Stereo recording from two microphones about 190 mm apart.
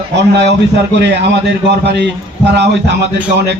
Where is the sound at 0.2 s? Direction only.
65° right (ahead or behind).